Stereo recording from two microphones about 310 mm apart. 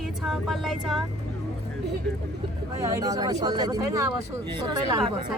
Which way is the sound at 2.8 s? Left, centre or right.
Centre.